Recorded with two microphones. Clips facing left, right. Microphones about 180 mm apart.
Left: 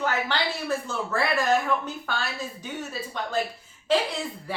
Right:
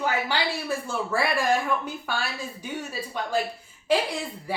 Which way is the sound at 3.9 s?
10° right (ahead or behind).